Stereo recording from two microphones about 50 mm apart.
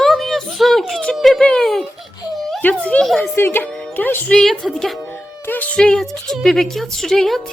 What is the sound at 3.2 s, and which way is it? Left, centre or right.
A child's voice, left.